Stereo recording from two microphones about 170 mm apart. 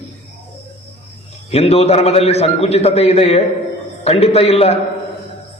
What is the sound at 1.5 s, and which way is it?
A man's voice, 35° left (ahead or behind).